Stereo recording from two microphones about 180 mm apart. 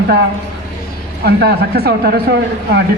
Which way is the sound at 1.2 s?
65° right (ahead or behind).